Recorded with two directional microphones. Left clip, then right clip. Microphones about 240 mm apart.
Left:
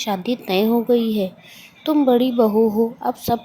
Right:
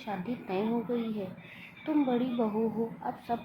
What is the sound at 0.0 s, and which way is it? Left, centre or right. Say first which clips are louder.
Speech: left 14 dB; left.